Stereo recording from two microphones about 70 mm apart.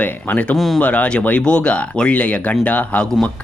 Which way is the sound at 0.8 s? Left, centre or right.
Centre.